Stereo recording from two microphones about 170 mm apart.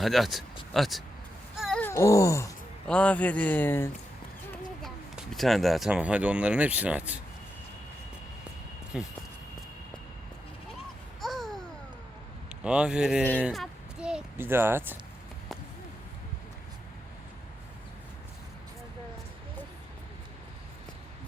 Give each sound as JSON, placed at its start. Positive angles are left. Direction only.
{"t": 0.0, "sound": "speech", "side_deg": 0}
{"t": 1.6, "sound": "a sound", "side_deg": 5}
{"t": 1.9, "sound": "speech", "side_deg": 15}
{"t": 2.8, "sound": "speech", "side_deg": 5}
{"t": 4.8, "sound": "speech", "side_deg": 0}
{"t": 8.9, "sound": "speech", "side_deg": -5}
{"t": 11.2, "sound": "babbling", "side_deg": 0}
{"t": 12.6, "sound": "speech", "side_deg": -5}